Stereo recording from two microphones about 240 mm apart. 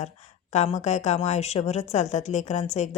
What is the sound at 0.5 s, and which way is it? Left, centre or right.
A woman's voice, left.